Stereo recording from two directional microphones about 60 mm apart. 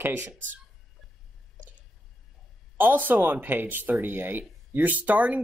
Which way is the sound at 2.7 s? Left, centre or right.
Right.